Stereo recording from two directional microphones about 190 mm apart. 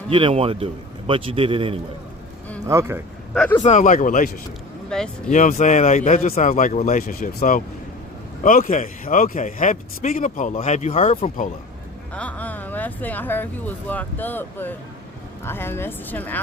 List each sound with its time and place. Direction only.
0.1 s a man's voice: 25° right (ahead or behind)
2.6 s speech: 15° right (ahead or behind)
3.3 s speech: 5° left (ahead or behind)
3.6 s speech: 40° left (ahead or behind)
4.9 s speech: 5° left (ahead or behind)
5.3 s speech: 40° left (ahead or behind)
7.1 s speech: 50° left (ahead or behind)
12.1 s speech: 10° left (ahead or behind)